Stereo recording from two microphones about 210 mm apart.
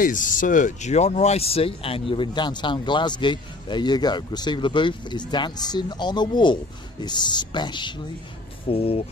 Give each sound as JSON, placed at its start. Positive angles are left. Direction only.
{"t": 0.0, "sound": "speech", "side_deg": 40}